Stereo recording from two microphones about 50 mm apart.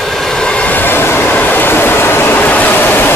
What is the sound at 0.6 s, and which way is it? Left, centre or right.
Train, left.